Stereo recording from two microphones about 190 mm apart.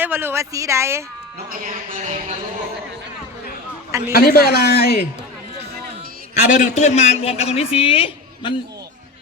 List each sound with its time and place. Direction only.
0.0 s speech: 10° right (ahead or behind)
1.5 s speech: 45° right (ahead or behind)
4.1 s a man's voice: 55° left (ahead or behind)
6.3 s a man's voice: 40° left (ahead or behind)